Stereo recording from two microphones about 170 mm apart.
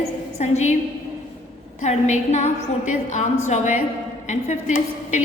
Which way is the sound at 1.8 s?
40° left (ahead or behind).